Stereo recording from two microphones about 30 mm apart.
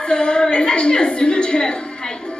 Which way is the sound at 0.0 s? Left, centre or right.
Left.